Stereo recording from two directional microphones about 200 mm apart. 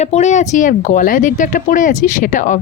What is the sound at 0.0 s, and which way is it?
Speech, 35° left (ahead or behind).